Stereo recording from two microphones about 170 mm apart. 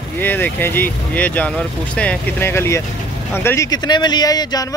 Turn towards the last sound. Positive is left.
turn(degrees=20)  # may be behind; listen again after turning